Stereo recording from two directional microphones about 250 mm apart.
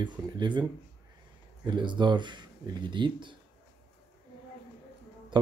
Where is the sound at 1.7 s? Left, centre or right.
Centre.